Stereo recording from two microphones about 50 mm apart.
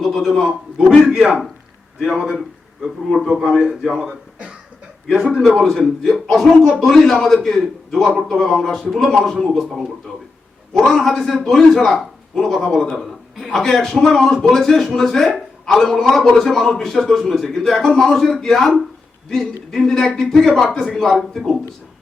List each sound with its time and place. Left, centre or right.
0.0 s a man's voice: centre
4.0 s throat clearing: centre
5.0 s a man's voice: centre
10.8 s a man's voice: centre